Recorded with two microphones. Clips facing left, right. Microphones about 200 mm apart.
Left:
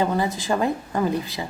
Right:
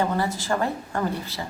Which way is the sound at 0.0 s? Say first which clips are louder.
Left 2 dB; 15° left (ahead or behind).